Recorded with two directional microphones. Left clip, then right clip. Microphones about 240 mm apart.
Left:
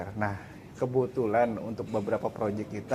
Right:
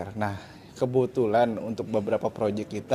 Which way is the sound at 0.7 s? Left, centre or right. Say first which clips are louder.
Right 4 dB; right.